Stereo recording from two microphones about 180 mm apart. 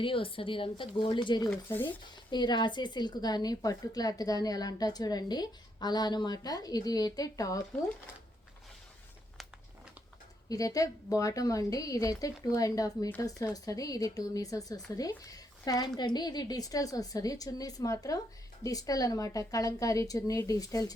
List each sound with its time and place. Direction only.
0.0 s a woman's voice: 30° left (ahead or behind)
1.5 s speech: 10° left (ahead or behind)
2.3 s a woman's voice: 25° left (ahead or behind)
10.5 s a woman's voice: 20° left (ahead or behind)